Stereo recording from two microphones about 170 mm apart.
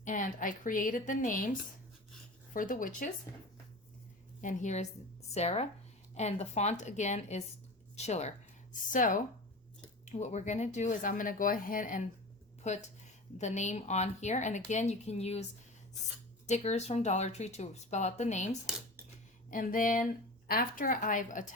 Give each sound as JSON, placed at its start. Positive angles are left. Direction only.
{"t": 0.0, "sound": "speech", "side_deg": 50}
{"t": 4.4, "sound": "a woman's voice", "side_deg": 45}
{"t": 16.5, "sound": "speech", "side_deg": 40}